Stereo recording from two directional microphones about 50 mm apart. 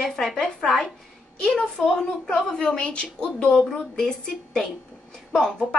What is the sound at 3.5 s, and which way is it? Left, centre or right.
Speech, centre.